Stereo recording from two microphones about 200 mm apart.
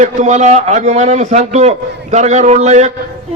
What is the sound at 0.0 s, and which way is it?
A man's voice, 35° right (ahead or behind).